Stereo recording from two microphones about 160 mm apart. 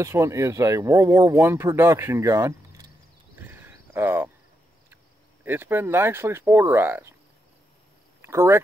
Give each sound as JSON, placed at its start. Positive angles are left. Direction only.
{"t": 0.0, "sound": "speech", "side_deg": -20}
{"t": 3.3, "sound": "a sound", "side_deg": -15}
{"t": 5.4, "sound": "speech", "side_deg": -15}
{"t": 8.2, "sound": "speech", "side_deg": -15}